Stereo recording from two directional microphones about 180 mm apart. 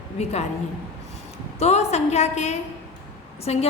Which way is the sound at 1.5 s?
35° left (ahead or behind).